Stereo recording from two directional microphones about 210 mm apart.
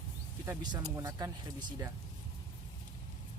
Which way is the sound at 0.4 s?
20° right (ahead or behind).